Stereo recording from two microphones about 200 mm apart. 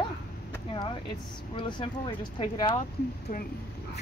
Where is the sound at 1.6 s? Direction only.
25° left (ahead or behind).